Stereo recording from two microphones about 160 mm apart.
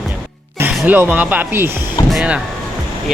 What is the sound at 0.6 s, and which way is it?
Speech, 15° right (ahead or behind).